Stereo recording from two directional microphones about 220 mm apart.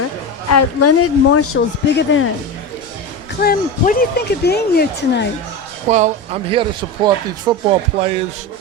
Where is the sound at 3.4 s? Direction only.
45° left (ahead or behind).